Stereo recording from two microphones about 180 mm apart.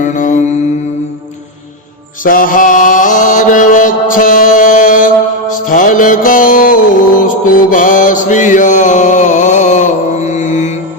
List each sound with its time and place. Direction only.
0.0 s mantra: 45° left (ahead or behind)
2.2 s mantra: 50° left (ahead or behind)